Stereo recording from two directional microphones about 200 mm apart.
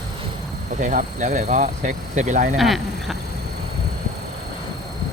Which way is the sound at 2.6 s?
Centre (ahead or behind).